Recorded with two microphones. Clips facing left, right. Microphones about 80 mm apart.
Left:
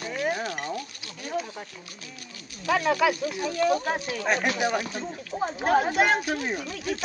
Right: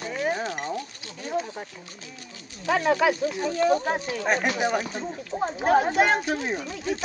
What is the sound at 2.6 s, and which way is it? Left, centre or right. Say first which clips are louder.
Speech: right 1 dB; right.